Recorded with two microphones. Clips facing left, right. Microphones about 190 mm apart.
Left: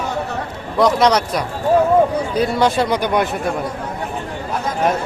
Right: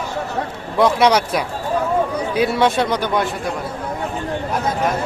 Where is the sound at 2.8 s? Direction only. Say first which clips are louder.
Left 2 dB; 10° left (ahead or behind).